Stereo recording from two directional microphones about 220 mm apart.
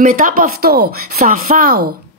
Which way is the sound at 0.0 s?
40° right (ahead or behind).